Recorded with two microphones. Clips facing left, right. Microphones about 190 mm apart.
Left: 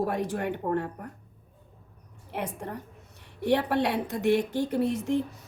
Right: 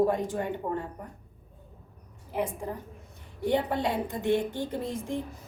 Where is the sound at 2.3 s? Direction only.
70° left (ahead or behind).